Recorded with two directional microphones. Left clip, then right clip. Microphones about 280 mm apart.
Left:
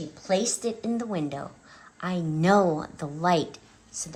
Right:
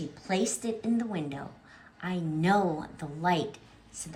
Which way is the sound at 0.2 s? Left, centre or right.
Centre.